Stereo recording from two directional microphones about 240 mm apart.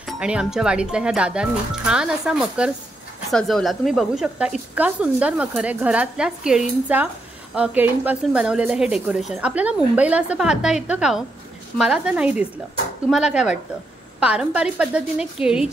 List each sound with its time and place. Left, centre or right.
0.0 s speech: centre